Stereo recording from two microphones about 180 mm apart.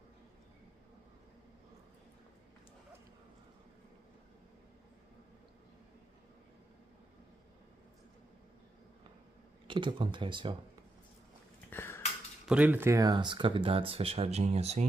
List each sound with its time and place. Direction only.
9.7 s speech: 25° right (ahead or behind)
11.7 s a sound: 15° left (ahead or behind)
12.4 s speech: 10° right (ahead or behind); by 14.9 s 35° right (ahead or behind)